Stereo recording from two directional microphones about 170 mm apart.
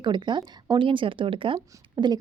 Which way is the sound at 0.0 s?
25° right (ahead or behind).